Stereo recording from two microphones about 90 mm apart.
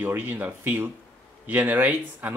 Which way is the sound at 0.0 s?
20° right (ahead or behind).